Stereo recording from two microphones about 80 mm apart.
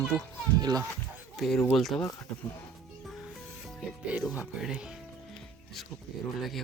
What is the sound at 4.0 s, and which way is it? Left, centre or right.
Speech, centre.